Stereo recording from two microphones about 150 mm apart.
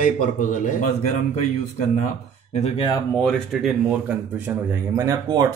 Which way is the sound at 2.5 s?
45° left (ahead or behind).